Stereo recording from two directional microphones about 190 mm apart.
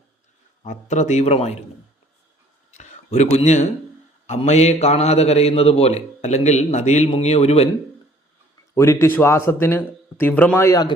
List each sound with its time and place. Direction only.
0.6 s a man's voice: 40° left (ahead or behind)
2.7 s a sound: 35° left (ahead or behind)
4.3 s a man's voice: 35° left (ahead or behind)
8.7 s speech: 15° left (ahead or behind)